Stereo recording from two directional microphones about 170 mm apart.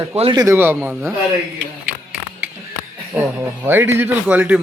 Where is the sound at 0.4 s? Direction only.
15° right (ahead or behind).